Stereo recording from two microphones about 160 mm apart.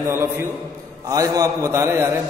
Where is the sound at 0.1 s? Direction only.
15° right (ahead or behind).